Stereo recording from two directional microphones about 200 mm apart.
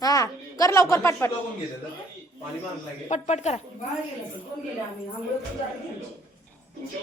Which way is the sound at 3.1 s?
35° left (ahead or behind).